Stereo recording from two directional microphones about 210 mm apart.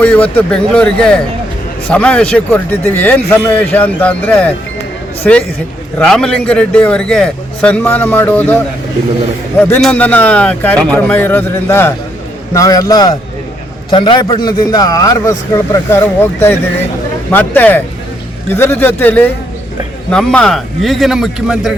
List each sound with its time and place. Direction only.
0.0 s a man's voice: 5° left (ahead or behind)